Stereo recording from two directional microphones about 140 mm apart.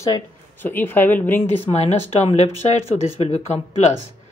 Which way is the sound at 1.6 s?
50° left (ahead or behind).